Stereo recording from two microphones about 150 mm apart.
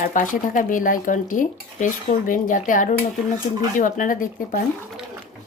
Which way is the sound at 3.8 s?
65° left (ahead or behind).